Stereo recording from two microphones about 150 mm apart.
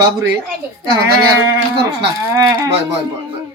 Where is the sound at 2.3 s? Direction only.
25° right (ahead or behind).